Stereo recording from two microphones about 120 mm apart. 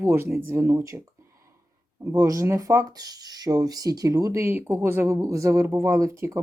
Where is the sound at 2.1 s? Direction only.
25° right (ahead or behind).